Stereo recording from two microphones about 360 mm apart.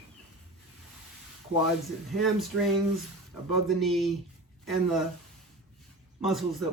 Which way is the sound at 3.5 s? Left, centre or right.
Centre.